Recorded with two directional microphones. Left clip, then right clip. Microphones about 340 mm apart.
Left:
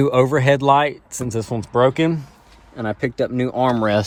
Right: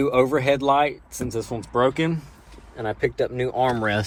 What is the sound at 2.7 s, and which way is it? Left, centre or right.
Speech, centre.